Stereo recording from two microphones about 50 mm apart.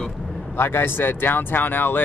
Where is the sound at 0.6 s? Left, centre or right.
Left.